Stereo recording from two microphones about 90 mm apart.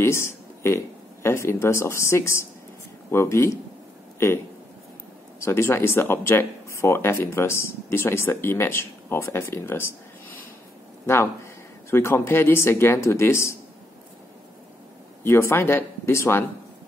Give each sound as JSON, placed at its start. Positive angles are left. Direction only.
{"t": 0.0, "sound": "speech", "side_deg": 30}
{"t": 5.4, "sound": "speech", "side_deg": 30}
{"t": 11.9, "sound": "speech", "side_deg": 30}
{"t": 15.2, "sound": "speech", "side_deg": 30}